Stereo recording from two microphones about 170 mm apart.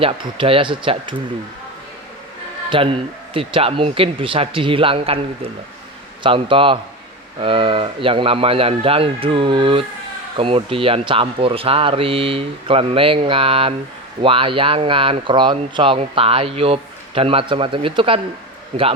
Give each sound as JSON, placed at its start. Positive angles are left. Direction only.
{"t": 0.0, "sound": "speech", "side_deg": -30}
{"t": 2.6, "sound": "speech", "side_deg": -30}